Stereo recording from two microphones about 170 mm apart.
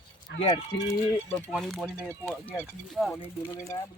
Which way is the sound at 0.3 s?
90° left.